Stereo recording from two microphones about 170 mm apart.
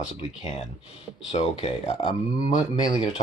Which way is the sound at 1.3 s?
40° left (ahead or behind).